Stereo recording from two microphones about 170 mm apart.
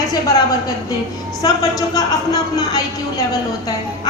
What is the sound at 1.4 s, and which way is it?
A woman's voice, 20° left (ahead or behind).